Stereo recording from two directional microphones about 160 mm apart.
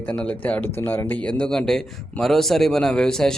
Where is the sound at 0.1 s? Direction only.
10° left (ahead or behind).